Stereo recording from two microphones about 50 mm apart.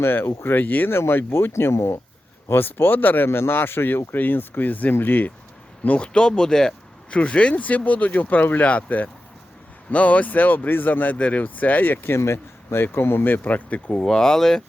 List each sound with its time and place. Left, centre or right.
0.0 s speech: left
0.9 s speech: left
2.5 s speech: left
3.2 s speech: left
6.1 s speech: centre
14.0 s speech: centre